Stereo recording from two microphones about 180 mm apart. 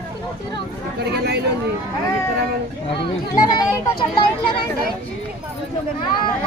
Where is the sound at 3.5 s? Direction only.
25° left (ahead or behind).